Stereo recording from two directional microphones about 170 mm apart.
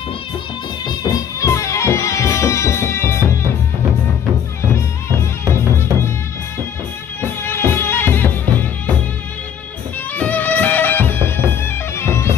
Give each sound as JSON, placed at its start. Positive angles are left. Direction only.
{"t": 1.4, "sound": "music", "side_deg": 15}
{"t": 7.2, "sound": "music", "side_deg": 15}
{"t": 10.1, "sound": "music", "side_deg": 10}